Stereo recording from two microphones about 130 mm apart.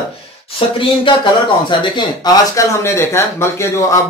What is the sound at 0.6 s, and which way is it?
Speech, 45° left (ahead or behind).